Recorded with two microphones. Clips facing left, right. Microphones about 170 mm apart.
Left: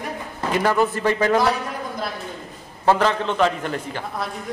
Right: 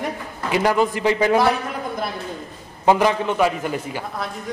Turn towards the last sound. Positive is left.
turn(degrees=-10)  # may be behind; listen again after turning